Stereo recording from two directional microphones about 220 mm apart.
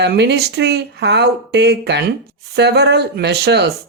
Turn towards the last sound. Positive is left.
turn(degrees=-50)  # may be behind; listen again after turning